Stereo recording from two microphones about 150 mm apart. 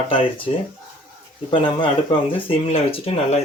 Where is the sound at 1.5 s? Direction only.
35° left (ahead or behind).